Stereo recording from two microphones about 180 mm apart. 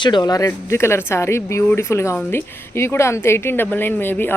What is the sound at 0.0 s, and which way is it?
Speech, 25° left (ahead or behind).